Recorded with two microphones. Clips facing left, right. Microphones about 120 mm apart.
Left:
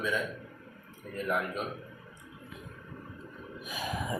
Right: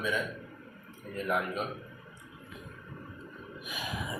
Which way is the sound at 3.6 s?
40° left (ahead or behind).